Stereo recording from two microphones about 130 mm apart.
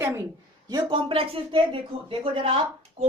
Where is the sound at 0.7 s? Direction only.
30° right (ahead or behind).